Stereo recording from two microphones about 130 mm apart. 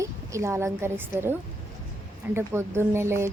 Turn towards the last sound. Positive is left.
turn(degrees=-20)  # may be behind; listen again after turning